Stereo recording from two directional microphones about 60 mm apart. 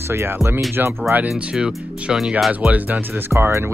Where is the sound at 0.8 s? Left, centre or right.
Right.